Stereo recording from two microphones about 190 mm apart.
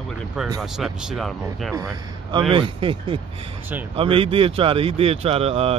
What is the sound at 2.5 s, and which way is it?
Speech, 25° right (ahead or behind).